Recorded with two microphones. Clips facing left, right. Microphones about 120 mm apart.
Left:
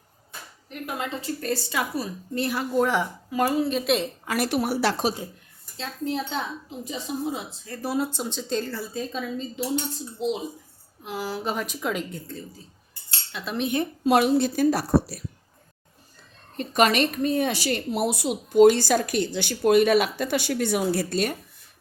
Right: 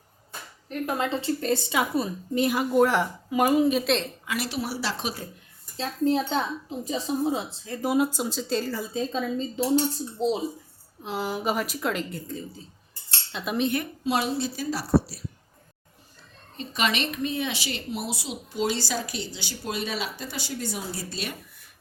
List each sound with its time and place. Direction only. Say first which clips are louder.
0.7 s a woman's voice: right 4 dB; 35° right (ahead or behind); by 2.8 s 15° right (ahead or behind)
2.8 s speech: right 2 dB; centre (ahead or behind)
3.3 s speech: right 2 dB; 15° right (ahead or behind)
4.3 s a woman's voice: left 6 dB; 50° left (ahead or behind)
5.7 s a woman's voice: right 5 dB; 40° right (ahead or behind)
7.8 s speech: right 3 dB; 15° right (ahead or behind)
9.0 s a woman's voice: right 3 dB; 25° right (ahead or behind)
9.7 s a woman's voice: right 5 dB; 35° right (ahead or behind)
11.0 s a woman's voice: right 2 dB; 25° right (ahead or behind)
11.5 s speech: even; 5° right (ahead or behind)
13.3 s speech: right 2 dB; 20° right (ahead or behind)
14.0 s a woman's voice: left 8 dB; 55° left (ahead or behind)
16.6 s a woman's voice: left 7 dB; 45° left (ahead or behind)